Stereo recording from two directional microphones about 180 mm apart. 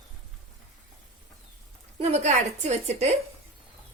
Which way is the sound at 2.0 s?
35° right (ahead or behind).